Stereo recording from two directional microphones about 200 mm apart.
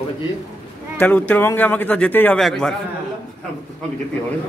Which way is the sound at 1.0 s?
5° left (ahead or behind).